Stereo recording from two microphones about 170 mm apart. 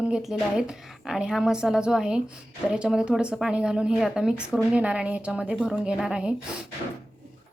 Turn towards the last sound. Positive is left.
turn(degrees=-5)  # may be behind; listen again after turning